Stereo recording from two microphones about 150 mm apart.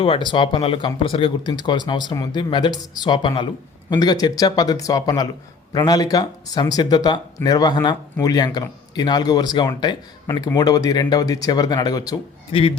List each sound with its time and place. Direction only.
0.0 s speech: 35° left (ahead or behind)
12.5 s speech: 35° left (ahead or behind)